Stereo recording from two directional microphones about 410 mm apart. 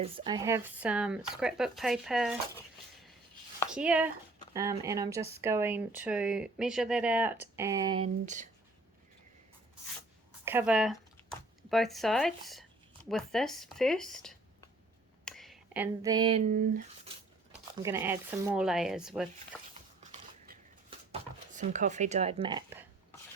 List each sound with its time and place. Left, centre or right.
0.0 s speech: centre
3.6 s speech: centre
10.4 s speech: centre
17.8 s speech: centre
19.7 s a sound: centre
21.1 s speech: centre